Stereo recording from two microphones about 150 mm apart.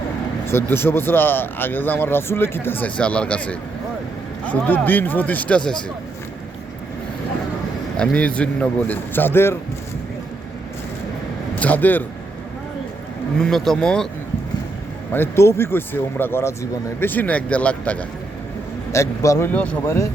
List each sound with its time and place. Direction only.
0.4 s speech: 15° left (ahead or behind)
7.9 s speech: 5° left (ahead or behind)
11.6 s speech: 10° left (ahead or behind)
13.4 s speech: centre (ahead or behind)
15.1 s speech: 15° left (ahead or behind)
18.9 s a man's voice: 20° left (ahead or behind)
19.5 s speech: 10° left (ahead or behind)